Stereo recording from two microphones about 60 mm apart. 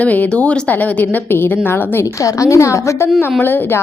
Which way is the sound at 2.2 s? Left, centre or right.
Left.